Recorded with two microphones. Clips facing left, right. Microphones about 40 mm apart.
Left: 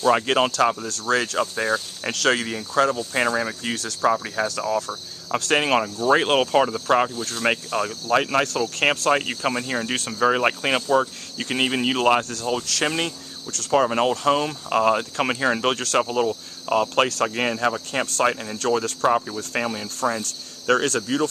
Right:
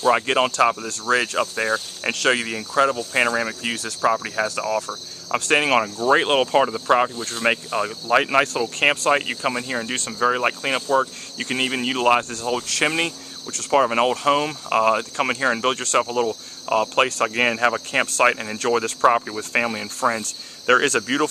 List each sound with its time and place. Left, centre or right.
0.0 s speech: centre
0.5 s speech: centre
8.1 s speech: centre
12.6 s speech: centre
16.1 s cricket: centre
16.6 s speech: centre; by 21.3 s right